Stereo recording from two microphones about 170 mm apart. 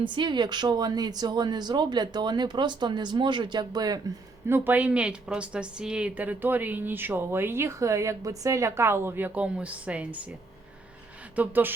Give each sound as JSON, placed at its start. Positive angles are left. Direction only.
{"t": 0.0, "sound": "speech", "side_deg": -30}
{"t": 11.3, "sound": "speech", "side_deg": -10}